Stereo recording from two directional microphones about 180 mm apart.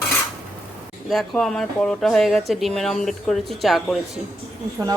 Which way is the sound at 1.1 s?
Centre (ahead or behind).